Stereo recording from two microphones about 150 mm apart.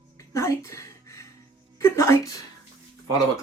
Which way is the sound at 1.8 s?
20° left (ahead or behind).